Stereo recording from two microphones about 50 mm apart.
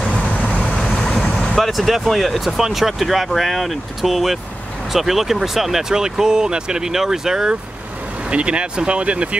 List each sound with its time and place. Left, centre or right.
0.9 s vehicle: centre
1.6 s speech: centre
8.3 s speech: right